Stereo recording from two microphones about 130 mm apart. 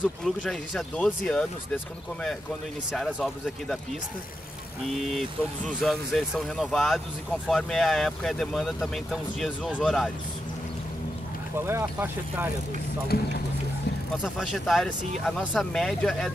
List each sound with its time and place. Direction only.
0.2 s speech: 5° left (ahead or behind)
2.9 s speech: 5° left (ahead or behind)
4.9 s speech: centre (ahead or behind)
11.5 s speech: 20° right (ahead or behind)
14.2 s speech: centre (ahead or behind)